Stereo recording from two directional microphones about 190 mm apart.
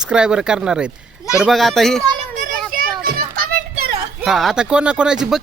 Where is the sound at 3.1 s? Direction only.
50° right (ahead or behind).